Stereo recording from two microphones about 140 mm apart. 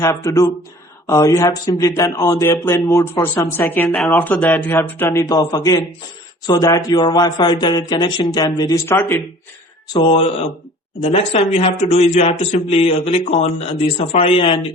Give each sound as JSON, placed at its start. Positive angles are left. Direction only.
{"t": 0.0, "sound": "speech", "side_deg": 25}
{"t": 10.0, "sound": "speech", "side_deg": 40}